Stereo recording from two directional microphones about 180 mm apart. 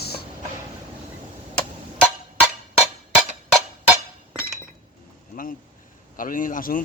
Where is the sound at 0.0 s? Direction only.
60° left (ahead or behind).